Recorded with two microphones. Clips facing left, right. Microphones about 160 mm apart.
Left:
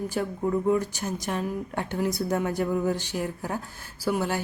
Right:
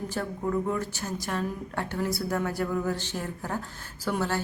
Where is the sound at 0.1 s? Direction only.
15° left (ahead or behind).